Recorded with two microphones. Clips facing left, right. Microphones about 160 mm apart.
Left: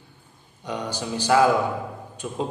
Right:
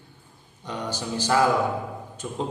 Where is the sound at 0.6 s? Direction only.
15° left (ahead or behind).